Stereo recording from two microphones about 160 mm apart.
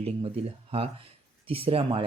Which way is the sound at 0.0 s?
35° right (ahead or behind).